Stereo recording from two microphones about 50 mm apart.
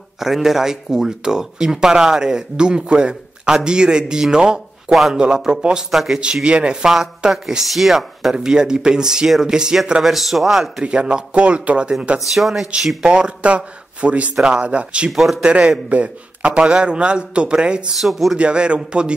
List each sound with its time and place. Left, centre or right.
0.2 s speech: centre
5.9 s a man's voice: centre
6.1 s speech: centre
7.4 s speech: centre
10.0 s a man's voice: centre
10.8 s a man's voice: centre
12.4 s a man's voice: centre
13.0 s a man's voice: centre
15.0 s a man's voice: centre
15.9 s a man's voice: right
17.9 s a man's voice: centre
18.3 s a man's voice: centre